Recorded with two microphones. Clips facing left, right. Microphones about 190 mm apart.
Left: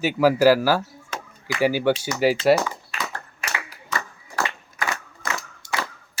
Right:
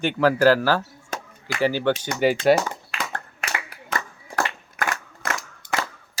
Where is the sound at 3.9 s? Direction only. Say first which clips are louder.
Right 1 dB; 55° right (ahead or behind).